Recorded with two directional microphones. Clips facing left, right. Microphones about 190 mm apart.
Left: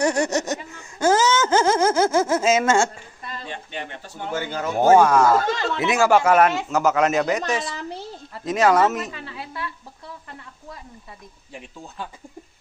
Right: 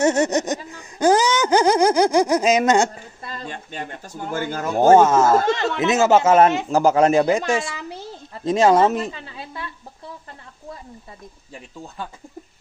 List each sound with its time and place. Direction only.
0.0 s a sound: 20° right (ahead or behind)
3.3 s speech: 45° right (ahead or behind)
4.9 s a woman's voice: 25° right (ahead or behind)